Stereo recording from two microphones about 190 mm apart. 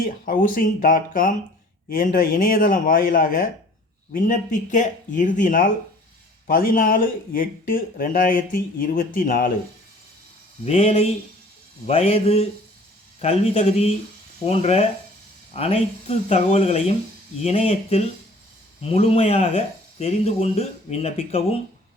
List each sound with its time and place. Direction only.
0.0 s speech: 45° left (ahead or behind)
10.7 s speech: 35° left (ahead or behind)